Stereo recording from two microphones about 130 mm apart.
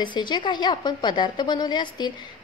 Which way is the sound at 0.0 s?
35° left (ahead or behind).